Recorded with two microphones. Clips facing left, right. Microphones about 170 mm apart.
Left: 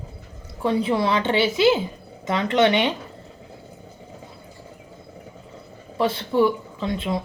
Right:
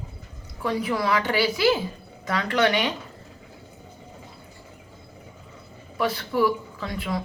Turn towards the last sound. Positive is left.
turn(degrees=25)  # may be behind; listen again after turning